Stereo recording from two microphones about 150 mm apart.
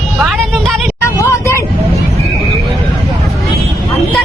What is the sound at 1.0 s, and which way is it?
Vehicle, 20° left (ahead or behind).